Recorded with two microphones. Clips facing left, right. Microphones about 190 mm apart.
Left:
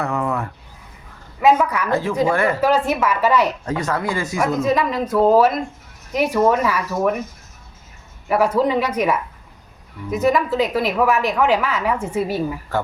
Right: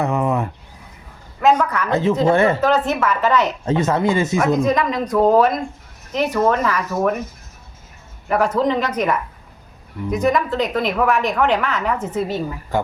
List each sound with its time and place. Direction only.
0.0 s a sound: 20° right (ahead or behind)
1.4 s speech: 10° left (ahead or behind)
1.9 s speech: 20° right (ahead or behind)
2.6 s speech: 10° left (ahead or behind)
3.7 s speech: 25° right (ahead or behind)
4.4 s a woman's voice: 5° left (ahead or behind)
8.3 s a woman's voice: 5° left (ahead or behind)